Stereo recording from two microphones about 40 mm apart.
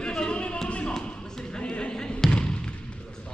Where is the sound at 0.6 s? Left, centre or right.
Left.